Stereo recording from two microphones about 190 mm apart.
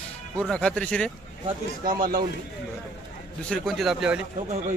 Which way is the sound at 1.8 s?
50° right (ahead or behind).